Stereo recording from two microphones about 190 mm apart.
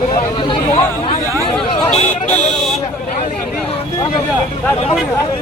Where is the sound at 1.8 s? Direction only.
35° left (ahead or behind).